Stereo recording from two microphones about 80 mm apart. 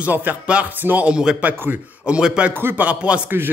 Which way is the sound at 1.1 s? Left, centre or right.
Centre.